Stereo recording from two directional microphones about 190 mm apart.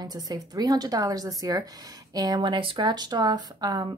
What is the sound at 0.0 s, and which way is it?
A woman's voice, 20° right (ahead or behind).